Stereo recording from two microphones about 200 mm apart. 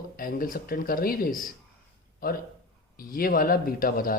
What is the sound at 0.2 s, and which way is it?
A man's voice, 45° left (ahead or behind).